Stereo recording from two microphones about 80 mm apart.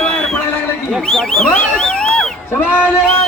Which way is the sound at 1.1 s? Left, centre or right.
Centre.